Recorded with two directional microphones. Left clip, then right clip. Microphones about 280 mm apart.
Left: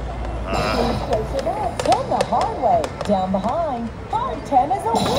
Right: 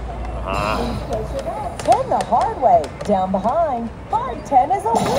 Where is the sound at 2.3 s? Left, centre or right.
Centre.